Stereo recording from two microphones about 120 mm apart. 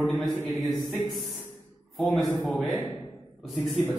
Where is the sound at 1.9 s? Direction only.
Centre (ahead or behind).